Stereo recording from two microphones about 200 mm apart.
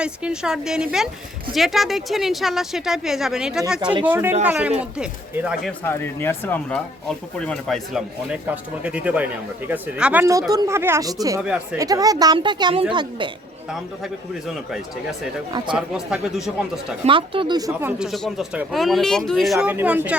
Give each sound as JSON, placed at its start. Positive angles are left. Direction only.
{"t": 0.0, "sound": "speech", "side_deg": -5}
{"t": 5.8, "sound": "speech", "side_deg": 10}
{"t": 11.3, "sound": "speech", "side_deg": -5}
{"t": 11.8, "sound": "speech", "side_deg": -20}
{"t": 13.7, "sound": "speech", "side_deg": 0}
{"t": 17.1, "sound": "speech", "side_deg": -25}
{"t": 18.1, "sound": "speech", "side_deg": 0}
{"t": 19.5, "sound": "speech", "side_deg": -10}